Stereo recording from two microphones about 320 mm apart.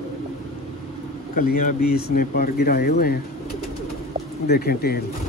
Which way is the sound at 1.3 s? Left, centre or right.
Left.